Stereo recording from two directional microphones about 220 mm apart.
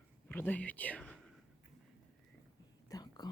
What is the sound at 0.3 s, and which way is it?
Speech, 10° left (ahead or behind).